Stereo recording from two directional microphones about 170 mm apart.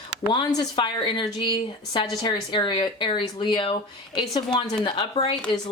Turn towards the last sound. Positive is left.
turn(degrees=25)  # may be behind; listen again after turning